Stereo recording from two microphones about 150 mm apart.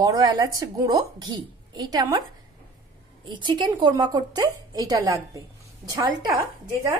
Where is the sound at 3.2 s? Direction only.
30° right (ahead or behind).